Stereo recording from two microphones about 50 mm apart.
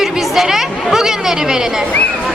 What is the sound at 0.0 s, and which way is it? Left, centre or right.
Speech, centre.